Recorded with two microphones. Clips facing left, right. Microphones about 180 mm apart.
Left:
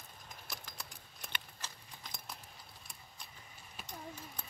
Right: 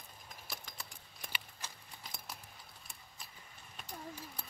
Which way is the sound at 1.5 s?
10° right (ahead or behind).